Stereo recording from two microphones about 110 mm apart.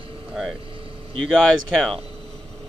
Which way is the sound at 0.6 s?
55° right (ahead or behind).